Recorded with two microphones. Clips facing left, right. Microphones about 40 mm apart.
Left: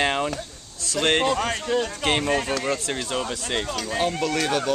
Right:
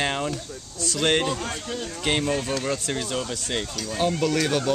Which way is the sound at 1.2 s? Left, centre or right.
Left.